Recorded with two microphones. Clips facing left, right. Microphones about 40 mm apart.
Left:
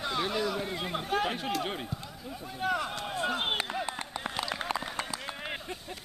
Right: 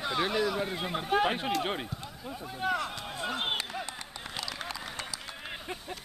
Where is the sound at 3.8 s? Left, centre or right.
Centre.